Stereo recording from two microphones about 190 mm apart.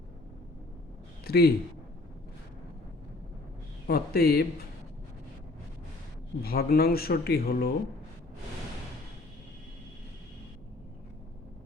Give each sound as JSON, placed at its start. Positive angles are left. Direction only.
{"t": 1.2, "sound": "a man's voice", "side_deg": 55}
{"t": 3.8, "sound": "a man's voice", "side_deg": 55}
{"t": 6.4, "sound": "speech", "side_deg": 55}